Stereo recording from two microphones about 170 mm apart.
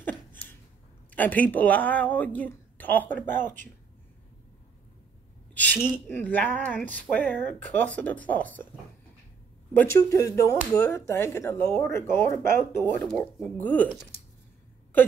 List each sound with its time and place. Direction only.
1.1 s speech: 10° left (ahead or behind)
5.5 s a sound: 10° left (ahead or behind)
6.0 s speech: 10° left (ahead or behind)
9.8 s speech: 20° left (ahead or behind)